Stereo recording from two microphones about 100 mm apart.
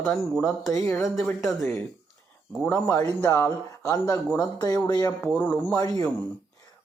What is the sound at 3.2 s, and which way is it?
Speech, 25° left (ahead or behind).